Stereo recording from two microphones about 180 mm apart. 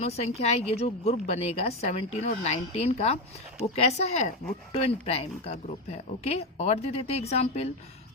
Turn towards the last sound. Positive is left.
turn(degrees=35)  # may be behind; listen again after turning